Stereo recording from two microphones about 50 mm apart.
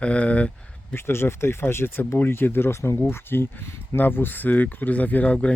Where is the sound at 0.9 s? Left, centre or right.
Left.